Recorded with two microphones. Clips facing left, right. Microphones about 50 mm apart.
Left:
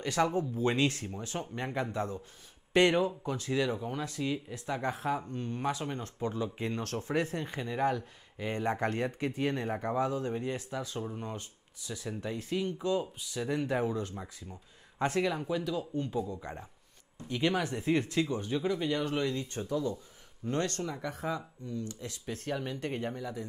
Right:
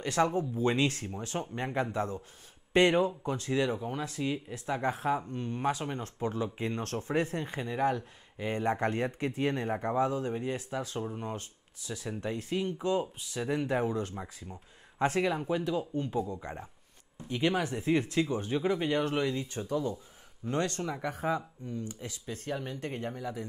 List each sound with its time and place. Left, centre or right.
0.0 s speech: centre
3.5 s speech: centre
6.8 s speech: right
7.6 s speech: centre
8.8 s speech: centre
10.5 s speech: right
11.0 s speech: centre
22.7 s speech: centre
23.1 s speech: centre